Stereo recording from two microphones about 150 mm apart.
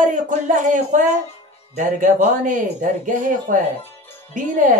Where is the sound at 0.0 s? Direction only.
60° right (ahead or behind).